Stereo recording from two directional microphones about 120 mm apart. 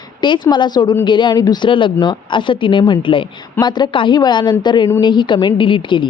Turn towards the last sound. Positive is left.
turn(degrees=40)  # may be behind; listen again after turning